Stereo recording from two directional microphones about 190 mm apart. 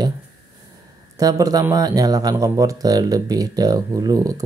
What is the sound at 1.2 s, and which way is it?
Speech, 20° right (ahead or behind).